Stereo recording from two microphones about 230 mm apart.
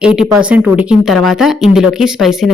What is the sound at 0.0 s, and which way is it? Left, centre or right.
Speech, centre.